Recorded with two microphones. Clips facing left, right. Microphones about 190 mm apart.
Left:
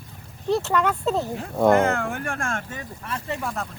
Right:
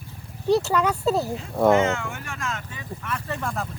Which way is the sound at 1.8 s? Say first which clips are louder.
Left 2 dB; 55° left (ahead or behind).